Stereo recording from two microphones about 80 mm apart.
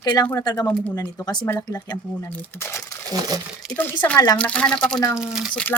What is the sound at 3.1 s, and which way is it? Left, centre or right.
Speech, right.